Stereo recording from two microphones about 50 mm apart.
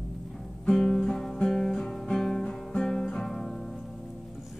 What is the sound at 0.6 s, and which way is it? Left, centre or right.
Music, centre.